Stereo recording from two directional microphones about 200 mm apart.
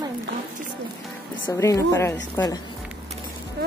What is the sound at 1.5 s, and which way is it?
Speech, 15° left (ahead or behind).